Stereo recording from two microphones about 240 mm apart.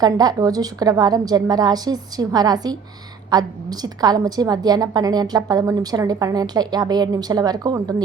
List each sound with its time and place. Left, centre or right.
0.0 s a woman's voice: centre